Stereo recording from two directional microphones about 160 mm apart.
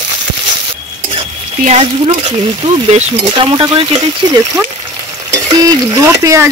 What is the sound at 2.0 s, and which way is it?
Speech, 40° right (ahead or behind).